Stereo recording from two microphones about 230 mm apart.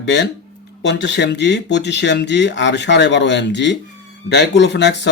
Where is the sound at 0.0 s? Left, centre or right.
Left.